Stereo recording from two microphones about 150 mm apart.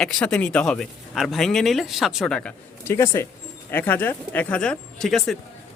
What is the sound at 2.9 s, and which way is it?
Speech, 20° left (ahead or behind).